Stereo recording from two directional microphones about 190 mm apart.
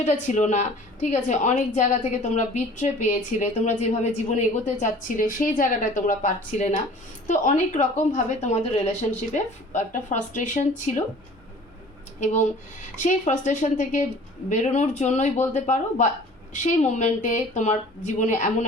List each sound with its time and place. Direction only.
0.0 s speech: 35° left (ahead or behind)
12.2 s speech: 40° left (ahead or behind)